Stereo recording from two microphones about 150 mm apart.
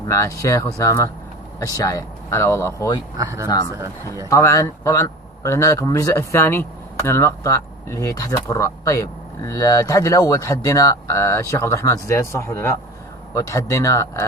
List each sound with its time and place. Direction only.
0.1 s a man's voice: 20° left (ahead or behind)
3.2 s speech: 20° right (ahead or behind)
4.3 s a man's voice: 20° left (ahead or behind)